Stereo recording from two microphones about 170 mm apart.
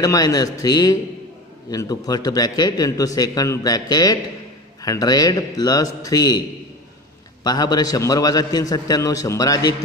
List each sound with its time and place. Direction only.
0.0 s a man's voice: 20° left (ahead or behind)
7.4 s a man's voice: 25° left (ahead or behind)